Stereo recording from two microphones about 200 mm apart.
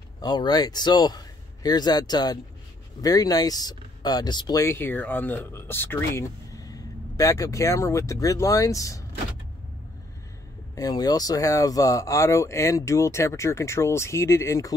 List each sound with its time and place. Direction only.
0.2 s speech: 20° left (ahead or behind)
10.7 s speech: 20° left (ahead or behind)